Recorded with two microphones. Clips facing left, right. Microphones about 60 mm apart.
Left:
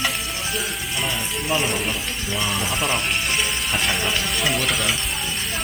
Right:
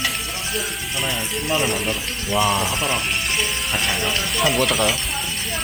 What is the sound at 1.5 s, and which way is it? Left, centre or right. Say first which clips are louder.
Speech: right 1 dB; centre.